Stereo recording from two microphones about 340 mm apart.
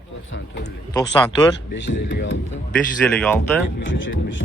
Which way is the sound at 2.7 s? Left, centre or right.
Centre.